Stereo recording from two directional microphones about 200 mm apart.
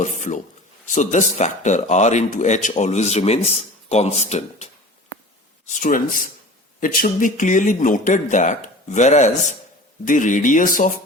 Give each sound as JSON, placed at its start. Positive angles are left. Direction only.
{"t": 0.0, "sound": "speech", "side_deg": 40}